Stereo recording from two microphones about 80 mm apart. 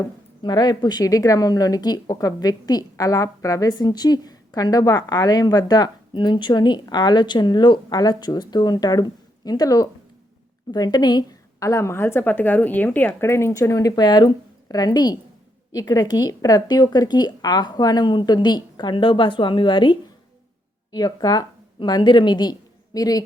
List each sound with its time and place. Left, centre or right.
0.4 s a woman's voice: left
13.5 s a woman's voice: left
20.9 s a woman's voice: left
23.0 s speech: left